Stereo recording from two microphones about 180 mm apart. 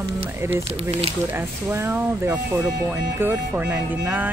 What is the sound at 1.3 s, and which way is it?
Speech, 15° right (ahead or behind).